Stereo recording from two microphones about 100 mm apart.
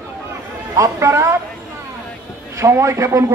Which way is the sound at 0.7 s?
30° right (ahead or behind).